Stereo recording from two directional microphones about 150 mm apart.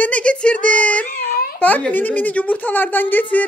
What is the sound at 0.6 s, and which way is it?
Child singing, 60° right (ahead or behind).